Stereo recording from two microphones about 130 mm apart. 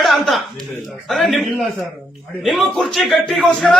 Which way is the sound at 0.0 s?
Centre (ahead or behind).